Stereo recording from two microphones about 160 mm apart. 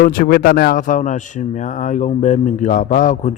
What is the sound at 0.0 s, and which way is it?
Speech, 65° left (ahead or behind).